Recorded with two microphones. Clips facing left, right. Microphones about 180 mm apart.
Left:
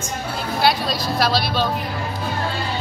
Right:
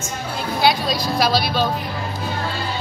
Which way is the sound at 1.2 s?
Centre (ahead or behind).